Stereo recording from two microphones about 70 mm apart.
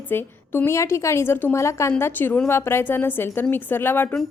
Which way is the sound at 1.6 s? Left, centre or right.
Left.